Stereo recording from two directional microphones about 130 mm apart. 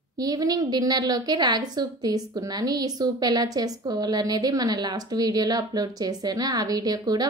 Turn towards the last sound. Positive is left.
turn(degrees=-30)  # may be behind; listen again after turning